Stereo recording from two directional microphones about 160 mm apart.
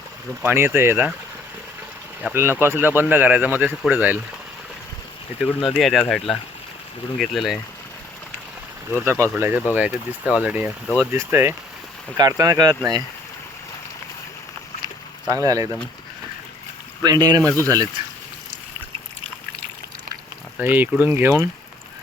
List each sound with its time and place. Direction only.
0.4 s speech: 15° right (ahead or behind)
2.3 s speech: 15° right (ahead or behind)
5.7 s speech: centre (ahead or behind)
8.9 s speech: 15° right (ahead or behind)
15.3 s speech: 20° right (ahead or behind)
17.0 s speech: 25° right (ahead or behind)
20.6 s speech: 10° right (ahead or behind)